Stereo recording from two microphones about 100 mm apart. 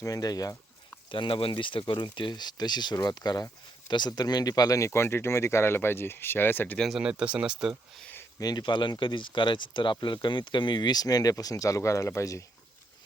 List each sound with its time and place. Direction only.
0.0 s speech: 35° left (ahead or behind)
1.1 s speech: 60° left (ahead or behind); by 4.9 s 35° left (ahead or behind)
4.9 s speech: 25° left (ahead or behind)
6.7 s speech: centre (ahead or behind)
8.4 s speech: 40° left (ahead or behind)